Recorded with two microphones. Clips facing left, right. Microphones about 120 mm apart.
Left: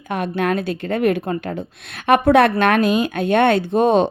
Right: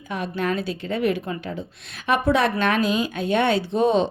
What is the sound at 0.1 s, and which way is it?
Speech, 60° left (ahead or behind).